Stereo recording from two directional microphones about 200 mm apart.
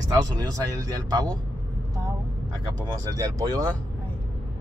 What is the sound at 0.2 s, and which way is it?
Speech, 20° right (ahead or behind).